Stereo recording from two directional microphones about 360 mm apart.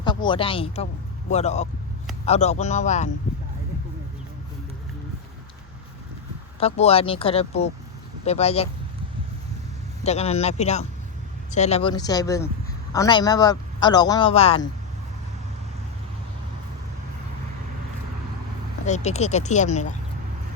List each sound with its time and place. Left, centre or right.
0.0 s a woman's voice: centre
6.6 s speech: centre
10.0 s speech: centre
18.9 s speech: centre